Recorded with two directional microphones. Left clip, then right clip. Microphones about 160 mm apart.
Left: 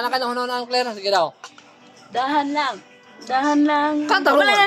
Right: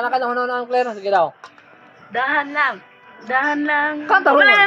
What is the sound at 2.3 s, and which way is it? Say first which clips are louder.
Speech: right 3 dB; 40° left (ahead or behind).